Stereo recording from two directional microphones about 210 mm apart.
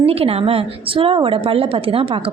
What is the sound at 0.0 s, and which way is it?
A woman's voice, 30° right (ahead or behind).